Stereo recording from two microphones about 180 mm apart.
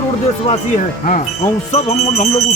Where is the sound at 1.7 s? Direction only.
35° left (ahead or behind).